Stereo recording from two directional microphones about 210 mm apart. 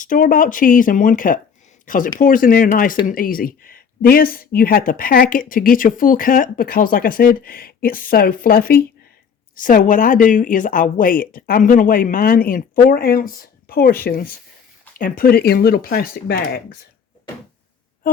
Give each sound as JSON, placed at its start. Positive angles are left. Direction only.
{"t": 0.0, "sound": "speech", "side_deg": 40}